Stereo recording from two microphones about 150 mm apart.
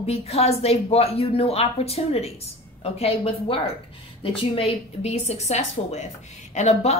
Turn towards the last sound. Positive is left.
turn(degrees=45)  # may be behind; listen again after turning